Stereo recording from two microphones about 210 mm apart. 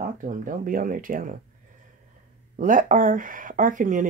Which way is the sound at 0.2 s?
40° right (ahead or behind).